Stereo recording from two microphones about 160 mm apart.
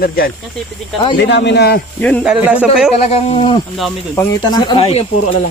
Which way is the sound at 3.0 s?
35° left (ahead or behind).